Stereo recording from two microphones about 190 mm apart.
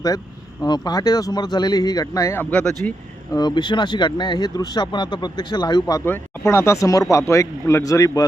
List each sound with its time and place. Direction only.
0.6 s speech: 20° left (ahead or behind)
3.3 s speech: 20° left (ahead or behind)